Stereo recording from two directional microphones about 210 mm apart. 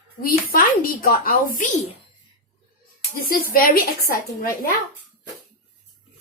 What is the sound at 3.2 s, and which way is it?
Speech, 45° left (ahead or behind).